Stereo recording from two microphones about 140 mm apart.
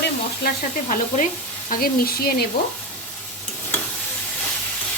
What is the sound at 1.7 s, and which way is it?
Frying, 90° left.